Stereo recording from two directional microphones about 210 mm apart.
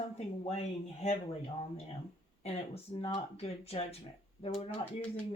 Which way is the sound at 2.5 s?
30° left (ahead or behind).